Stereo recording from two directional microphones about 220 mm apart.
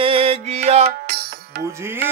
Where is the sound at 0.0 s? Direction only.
25° right (ahead or behind).